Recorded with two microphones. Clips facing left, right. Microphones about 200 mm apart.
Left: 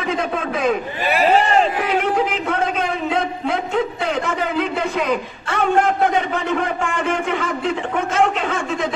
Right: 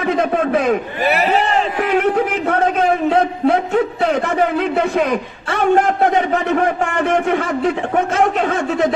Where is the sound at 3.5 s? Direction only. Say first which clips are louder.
Right 5 dB; 60° right (ahead or behind).